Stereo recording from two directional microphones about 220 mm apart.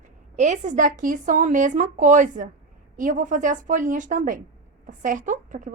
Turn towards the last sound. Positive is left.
turn(degrees=-35)  # may be behind; listen again after turning